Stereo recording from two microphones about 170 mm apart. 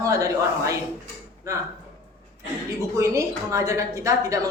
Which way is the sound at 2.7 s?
20° right (ahead or behind).